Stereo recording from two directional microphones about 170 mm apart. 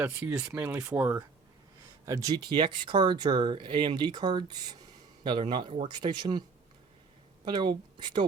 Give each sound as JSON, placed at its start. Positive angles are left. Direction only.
{"t": 0.0, "sound": "speech", "side_deg": -10}
{"t": 7.4, "sound": "speech", "side_deg": -25}